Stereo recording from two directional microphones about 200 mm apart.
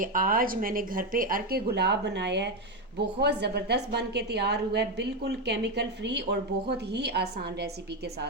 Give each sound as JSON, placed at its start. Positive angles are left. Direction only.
{"t": 0.0, "sound": "a woman's voice", "side_deg": -45}